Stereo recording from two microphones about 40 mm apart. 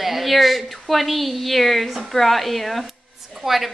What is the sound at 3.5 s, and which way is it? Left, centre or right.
Speech, centre.